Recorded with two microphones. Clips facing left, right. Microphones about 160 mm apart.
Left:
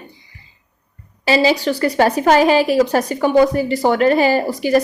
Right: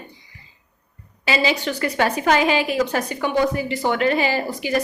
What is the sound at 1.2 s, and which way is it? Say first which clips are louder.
A woman's voice: left 6 dB; 35° left (ahead or behind).